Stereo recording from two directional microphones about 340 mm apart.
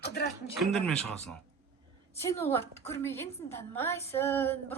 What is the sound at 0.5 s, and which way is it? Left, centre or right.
A woman's voice, centre.